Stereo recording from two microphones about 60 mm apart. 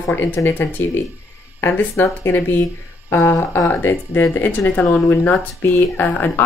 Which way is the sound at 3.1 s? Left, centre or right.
Left.